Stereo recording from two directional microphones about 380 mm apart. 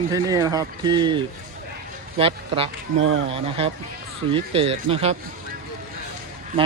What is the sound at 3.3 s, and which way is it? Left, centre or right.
Speech, centre.